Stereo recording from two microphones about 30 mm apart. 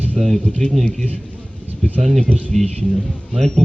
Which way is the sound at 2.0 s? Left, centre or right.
Centre.